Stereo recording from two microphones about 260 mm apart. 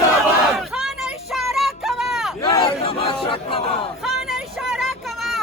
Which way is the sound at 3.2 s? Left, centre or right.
Left.